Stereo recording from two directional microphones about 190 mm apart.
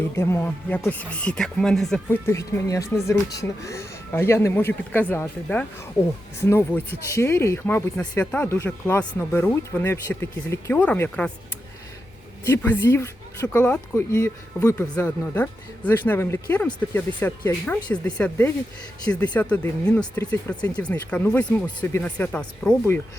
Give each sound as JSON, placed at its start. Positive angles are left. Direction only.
{"t": 0.2, "sound": "speech", "side_deg": 15}
{"t": 12.5, "sound": "speech", "side_deg": 10}
{"t": 17.4, "sound": "speech", "side_deg": 20}
{"t": 17.8, "sound": "speech", "side_deg": 5}